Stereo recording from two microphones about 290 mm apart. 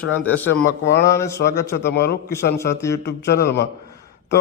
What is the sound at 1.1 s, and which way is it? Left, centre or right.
Speech, centre.